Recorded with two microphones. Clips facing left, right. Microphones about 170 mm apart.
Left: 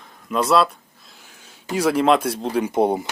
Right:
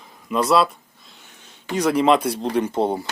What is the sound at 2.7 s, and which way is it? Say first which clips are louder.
Speech: left 3 dB; 15° left (ahead or behind).